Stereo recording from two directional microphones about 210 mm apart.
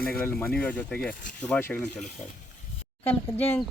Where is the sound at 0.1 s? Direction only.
10° left (ahead or behind).